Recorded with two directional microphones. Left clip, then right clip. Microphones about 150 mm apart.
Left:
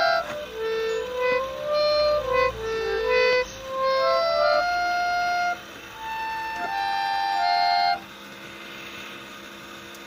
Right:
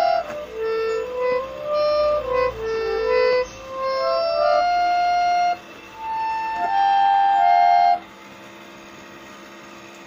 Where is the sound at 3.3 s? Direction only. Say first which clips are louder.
Right 2 dB; 5° left (ahead or behind).